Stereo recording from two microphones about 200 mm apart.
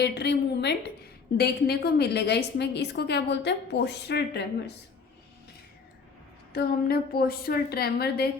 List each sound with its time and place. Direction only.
0.0 s a woman's voice: 60° left (ahead or behind)
6.5 s a woman's voice: 50° left (ahead or behind)